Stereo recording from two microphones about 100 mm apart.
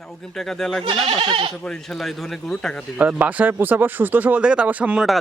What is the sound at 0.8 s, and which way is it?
Speech, 60° right (ahead or behind).